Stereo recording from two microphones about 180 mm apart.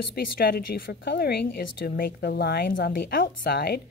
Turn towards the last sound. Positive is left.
turn(degrees=60)  # may be behind; listen again after turning